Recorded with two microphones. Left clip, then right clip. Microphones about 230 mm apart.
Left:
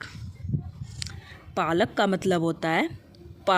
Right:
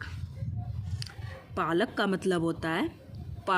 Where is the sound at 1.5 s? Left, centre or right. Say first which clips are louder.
Left 5 dB; left.